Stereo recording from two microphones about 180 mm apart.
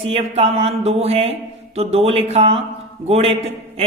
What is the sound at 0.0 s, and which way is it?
Speech, 35° right (ahead or behind).